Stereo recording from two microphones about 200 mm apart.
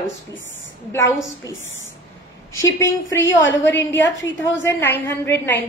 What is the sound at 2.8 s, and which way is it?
Speech, 15° left (ahead or behind).